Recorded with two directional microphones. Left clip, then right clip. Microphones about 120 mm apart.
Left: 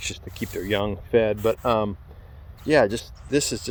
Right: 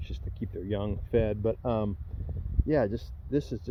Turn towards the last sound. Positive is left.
turn(degrees=5)  # may be behind; listen again after turning